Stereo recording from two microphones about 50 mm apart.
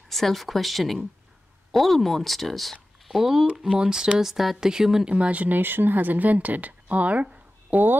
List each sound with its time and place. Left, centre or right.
0.1 s speech: centre
5.1 s speech: right
5.6 s speech: right
7.7 s speech: right